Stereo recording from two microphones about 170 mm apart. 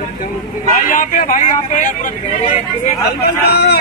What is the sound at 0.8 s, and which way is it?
Speech, 50° left (ahead or behind).